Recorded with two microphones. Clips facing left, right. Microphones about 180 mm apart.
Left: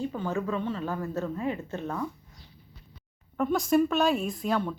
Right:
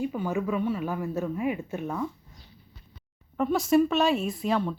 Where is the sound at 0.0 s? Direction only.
10° right (ahead or behind).